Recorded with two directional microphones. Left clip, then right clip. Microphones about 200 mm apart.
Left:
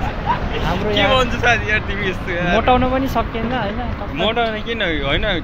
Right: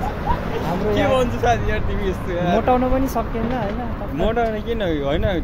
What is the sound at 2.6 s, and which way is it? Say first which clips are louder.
Speech: left 3 dB; 5° right (ahead or behind).